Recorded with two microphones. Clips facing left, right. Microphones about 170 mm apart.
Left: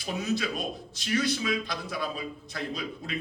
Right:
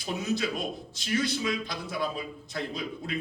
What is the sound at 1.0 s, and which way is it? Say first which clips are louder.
A man's voice: left 1 dB; 25° right (ahead or behind).